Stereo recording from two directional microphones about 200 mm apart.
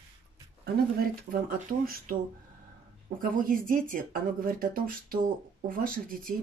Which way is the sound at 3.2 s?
45° right (ahead or behind).